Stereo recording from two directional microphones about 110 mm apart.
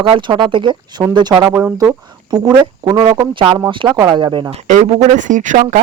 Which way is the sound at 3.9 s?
30° right (ahead or behind).